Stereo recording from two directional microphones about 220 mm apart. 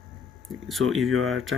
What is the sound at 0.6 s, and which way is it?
Speech, centre (ahead or behind).